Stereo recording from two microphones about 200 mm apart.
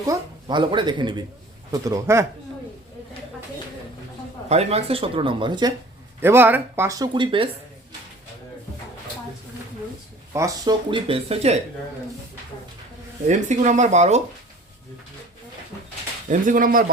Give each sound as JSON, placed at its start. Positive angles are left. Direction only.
{"t": 0.0, "sound": "speech", "side_deg": -20}
{"t": 4.4, "sound": "speech", "side_deg": -30}
{"t": 6.1, "sound": "speech", "side_deg": -10}
{"t": 10.3, "sound": "speech", "side_deg": -20}
{"t": 13.2, "sound": "speech", "side_deg": -35}
{"t": 16.3, "sound": "speech", "side_deg": -40}